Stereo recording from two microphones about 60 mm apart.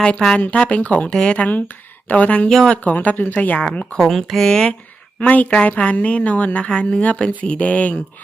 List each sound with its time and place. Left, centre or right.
0.0 s a woman's voice: centre
1.5 s speech: left
2.5 s speech: centre
2.8 s a woman's voice: left
3.9 s speech: centre
5.2 s a woman's voice: left